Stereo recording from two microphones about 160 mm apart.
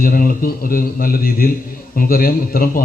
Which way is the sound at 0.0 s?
65° left (ahead or behind).